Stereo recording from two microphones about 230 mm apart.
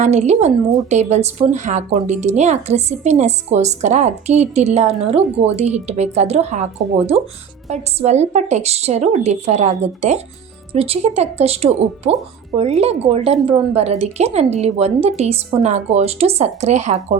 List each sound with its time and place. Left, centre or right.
0.0 s speech: right
7.7 s speech: right